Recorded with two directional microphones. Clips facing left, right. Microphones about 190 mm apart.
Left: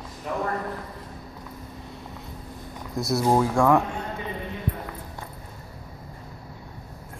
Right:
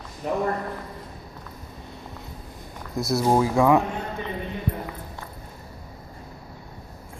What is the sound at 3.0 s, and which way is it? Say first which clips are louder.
Speech: right 1 dB; centre (ahead or behind).